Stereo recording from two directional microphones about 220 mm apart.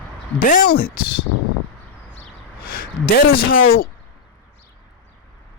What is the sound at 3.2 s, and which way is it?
Speech, 45° left (ahead or behind).